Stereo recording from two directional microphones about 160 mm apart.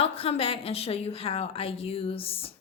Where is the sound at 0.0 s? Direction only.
35° left (ahead or behind).